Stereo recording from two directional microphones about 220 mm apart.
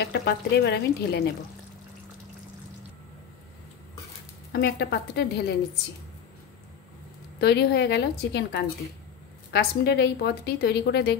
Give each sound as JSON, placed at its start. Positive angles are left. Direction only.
{"t": 0.0, "sound": "a woman's voice", "side_deg": 50}
{"t": 4.5, "sound": "a woman's voice", "side_deg": 45}
{"t": 7.3, "sound": "a woman's voice", "side_deg": 50}